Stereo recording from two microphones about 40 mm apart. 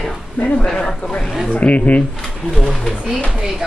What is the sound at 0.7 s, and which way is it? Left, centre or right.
Speech, centre.